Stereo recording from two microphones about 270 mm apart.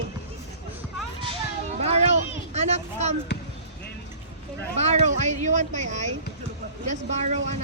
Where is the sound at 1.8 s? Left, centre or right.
Right.